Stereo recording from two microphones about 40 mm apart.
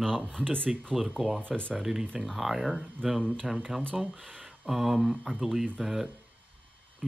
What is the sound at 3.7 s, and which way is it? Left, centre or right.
Speech, right.